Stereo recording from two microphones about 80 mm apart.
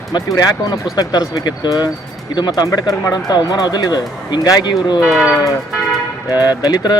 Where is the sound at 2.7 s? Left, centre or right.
Left.